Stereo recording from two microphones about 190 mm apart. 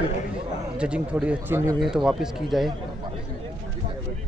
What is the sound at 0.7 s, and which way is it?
Speech, 5° right (ahead or behind).